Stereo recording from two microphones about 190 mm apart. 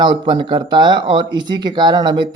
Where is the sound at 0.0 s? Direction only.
25° right (ahead or behind).